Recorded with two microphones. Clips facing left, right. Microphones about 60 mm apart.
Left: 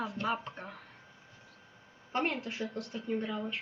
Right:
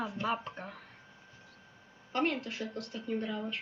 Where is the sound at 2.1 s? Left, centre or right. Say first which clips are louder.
Right 1 dB; left.